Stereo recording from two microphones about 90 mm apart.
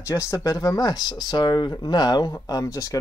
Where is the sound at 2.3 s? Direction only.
40° left (ahead or behind).